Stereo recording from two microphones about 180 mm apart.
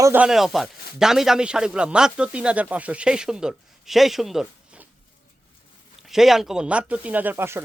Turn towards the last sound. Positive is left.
turn(degrees=-15)  # may be behind; listen again after turning